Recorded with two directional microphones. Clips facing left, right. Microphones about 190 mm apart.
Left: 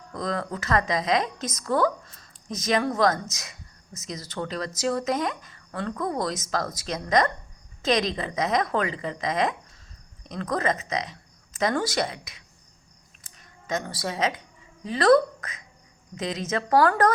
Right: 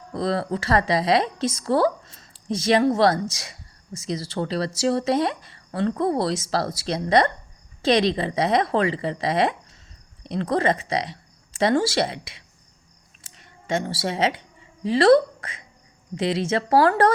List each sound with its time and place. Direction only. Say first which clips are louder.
0.1 s a woman's voice: right 5 dB; 30° right (ahead or behind)